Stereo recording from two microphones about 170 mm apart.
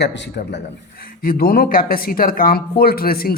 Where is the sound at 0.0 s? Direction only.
85° left.